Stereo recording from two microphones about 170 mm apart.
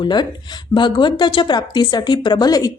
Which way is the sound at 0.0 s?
25° left (ahead or behind).